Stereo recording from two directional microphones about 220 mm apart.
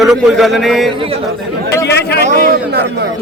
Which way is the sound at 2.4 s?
50° right (ahead or behind).